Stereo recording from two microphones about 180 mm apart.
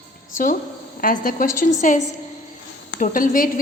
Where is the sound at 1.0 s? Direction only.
50° left (ahead or behind).